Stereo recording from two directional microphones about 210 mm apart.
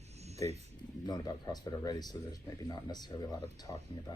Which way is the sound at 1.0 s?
20° left (ahead or behind).